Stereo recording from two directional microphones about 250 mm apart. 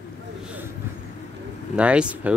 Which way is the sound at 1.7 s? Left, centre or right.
Centre.